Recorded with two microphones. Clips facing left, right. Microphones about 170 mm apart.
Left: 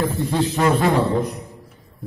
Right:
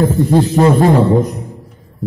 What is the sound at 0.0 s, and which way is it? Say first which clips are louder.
Speech: right 8 dB; 40° right (ahead or behind).